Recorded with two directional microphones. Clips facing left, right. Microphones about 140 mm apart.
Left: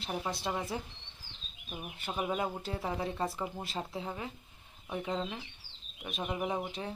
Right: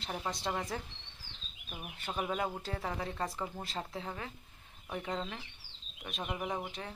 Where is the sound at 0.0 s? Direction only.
10° left (ahead or behind).